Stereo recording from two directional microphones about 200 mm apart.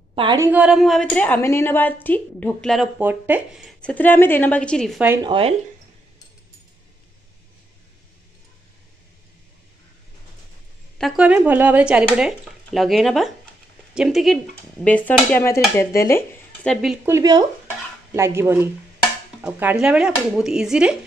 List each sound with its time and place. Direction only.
0.1 s a woman's voice: 25° right (ahead or behind)
0.5 s a woman's voice: 5° right (ahead or behind)
5.2 s speech: 25° right (ahead or behind)
11.0 s a woman's voice: centre (ahead or behind)
16.7 s a woman's voice: 5° right (ahead or behind); by 17.5 s 20° right (ahead or behind)
17.6 s stir: 15° right (ahead or behind)
19.4 s a woman's voice: 5° right (ahead or behind)